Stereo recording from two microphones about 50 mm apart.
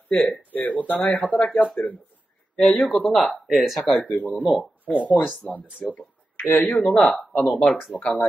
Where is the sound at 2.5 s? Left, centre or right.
Centre.